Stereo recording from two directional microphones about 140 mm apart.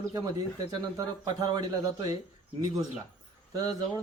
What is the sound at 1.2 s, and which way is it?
Speech, 30° right (ahead or behind).